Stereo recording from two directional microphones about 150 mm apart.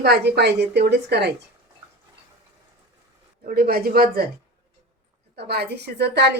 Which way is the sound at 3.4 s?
90° right.